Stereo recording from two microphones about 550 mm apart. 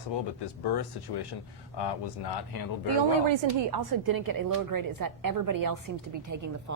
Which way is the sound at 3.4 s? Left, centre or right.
Right.